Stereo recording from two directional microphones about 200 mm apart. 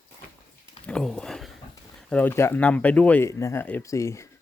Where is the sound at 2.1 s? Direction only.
10° left (ahead or behind).